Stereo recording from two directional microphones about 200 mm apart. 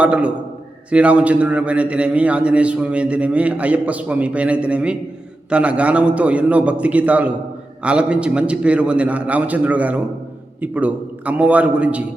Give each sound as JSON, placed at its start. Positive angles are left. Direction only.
{"t": 0.0, "sound": "a man's voice", "side_deg": -5}